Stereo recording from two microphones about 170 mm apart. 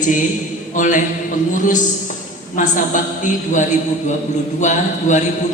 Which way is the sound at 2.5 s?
50° left (ahead or behind).